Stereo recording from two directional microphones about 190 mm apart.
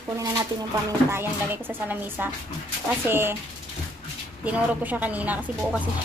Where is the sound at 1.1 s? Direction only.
10° right (ahead or behind).